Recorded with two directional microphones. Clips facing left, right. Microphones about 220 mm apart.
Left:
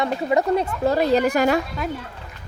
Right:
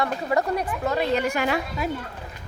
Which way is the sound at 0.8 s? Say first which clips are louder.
Left 5 dB; 35° left (ahead or behind).